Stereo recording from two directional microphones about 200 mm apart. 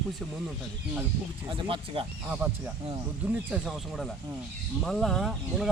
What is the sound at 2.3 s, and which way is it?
Speech, 5° right (ahead or behind).